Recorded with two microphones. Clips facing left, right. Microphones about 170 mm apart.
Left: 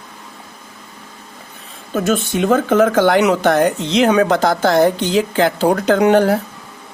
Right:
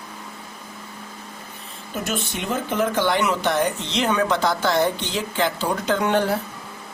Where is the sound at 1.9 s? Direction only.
90° left.